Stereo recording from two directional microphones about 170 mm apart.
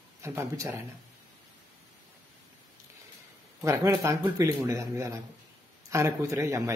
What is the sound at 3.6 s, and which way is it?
Speech, 20° right (ahead or behind).